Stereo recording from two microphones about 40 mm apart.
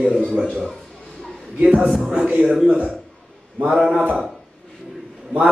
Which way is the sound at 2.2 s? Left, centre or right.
Right.